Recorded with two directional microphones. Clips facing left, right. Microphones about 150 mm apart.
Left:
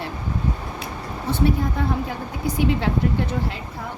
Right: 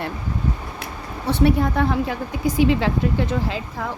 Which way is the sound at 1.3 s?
75° right (ahead or behind).